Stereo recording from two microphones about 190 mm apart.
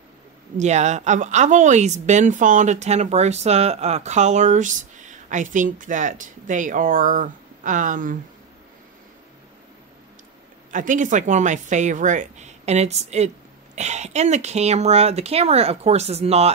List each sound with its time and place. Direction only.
0.6 s a woman's voice: 40° right (ahead or behind)
10.7 s a woman's voice: 45° right (ahead or behind)